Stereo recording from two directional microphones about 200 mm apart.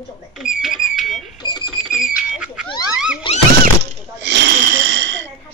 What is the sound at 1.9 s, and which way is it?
Speech, 5° right (ahead or behind).